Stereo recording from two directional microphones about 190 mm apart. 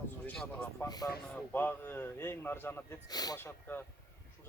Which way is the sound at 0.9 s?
20° left (ahead or behind).